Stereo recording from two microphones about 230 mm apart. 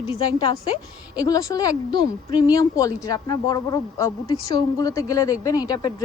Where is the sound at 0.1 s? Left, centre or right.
Left.